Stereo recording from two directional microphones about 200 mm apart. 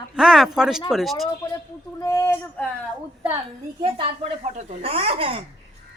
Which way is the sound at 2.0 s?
15° left (ahead or behind).